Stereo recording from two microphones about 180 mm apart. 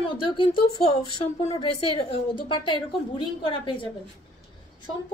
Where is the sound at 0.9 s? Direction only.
35° left (ahead or behind).